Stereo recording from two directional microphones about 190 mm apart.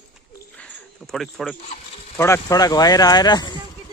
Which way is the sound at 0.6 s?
Centre (ahead or behind).